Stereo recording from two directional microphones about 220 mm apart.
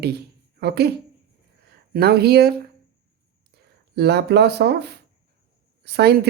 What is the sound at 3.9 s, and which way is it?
A woman's voice, 50° right (ahead or behind).